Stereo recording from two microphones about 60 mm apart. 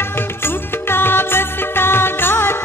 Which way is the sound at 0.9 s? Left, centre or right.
Left.